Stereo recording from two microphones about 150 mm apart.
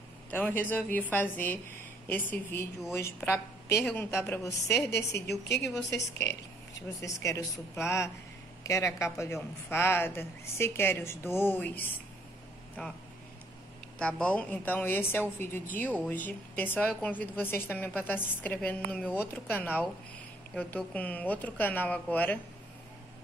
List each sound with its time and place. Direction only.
0.3 s a woman's voice: 10° left (ahead or behind)
5.1 s a woman's voice: 90° left
6.2 s a woman's voice: 20° left (ahead or behind)
13.9 s a woman's voice: 5° left (ahead or behind)